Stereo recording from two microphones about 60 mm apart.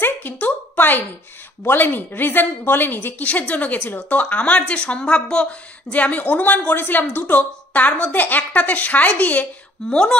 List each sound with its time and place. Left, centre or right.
0.0 s a sound: left
1.6 s a woman's voice: left
3.3 s a woman's voice: left